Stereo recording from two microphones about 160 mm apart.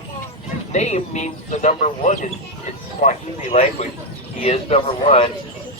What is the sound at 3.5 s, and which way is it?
A man's voice, 40° left (ahead or behind).